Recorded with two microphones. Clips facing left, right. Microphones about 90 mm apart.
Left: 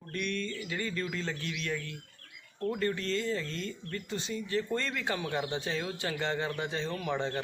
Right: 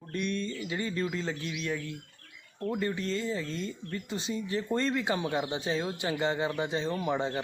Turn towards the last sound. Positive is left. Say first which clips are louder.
# right 3 dB
turn(degrees=-15)  # may be behind; listen again after turning